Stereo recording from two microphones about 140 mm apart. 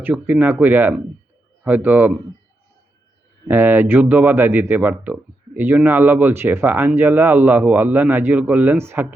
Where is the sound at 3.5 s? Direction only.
15° right (ahead or behind).